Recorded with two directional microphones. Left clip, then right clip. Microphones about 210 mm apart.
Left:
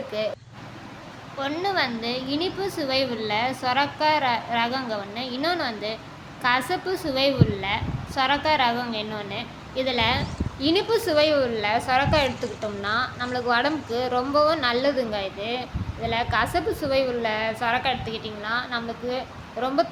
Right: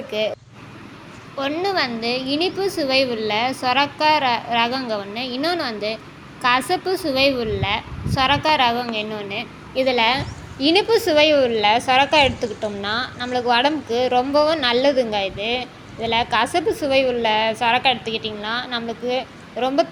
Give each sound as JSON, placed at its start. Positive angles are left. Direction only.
{"t": 1.4, "sound": "a woman's voice", "side_deg": -15}